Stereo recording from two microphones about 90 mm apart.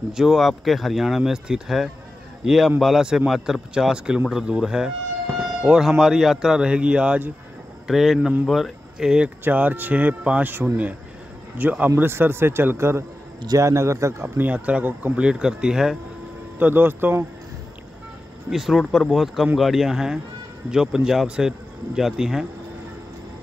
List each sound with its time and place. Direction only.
0.1 s a man's voice: 5° right (ahead or behind)
7.8 s speech: 5° right (ahead or behind)
9.4 s a man's voice: 20° right (ahead or behind)
14.5 s a man's voice: 15° right (ahead or behind)
16.5 s speech: 20° right (ahead or behind)
18.5 s a man's voice: 5° right (ahead or behind)